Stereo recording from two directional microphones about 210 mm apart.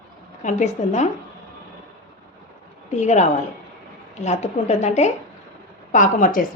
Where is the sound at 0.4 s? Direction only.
35° left (ahead or behind).